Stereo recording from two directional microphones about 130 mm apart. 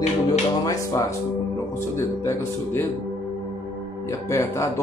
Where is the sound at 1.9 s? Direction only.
20° left (ahead or behind).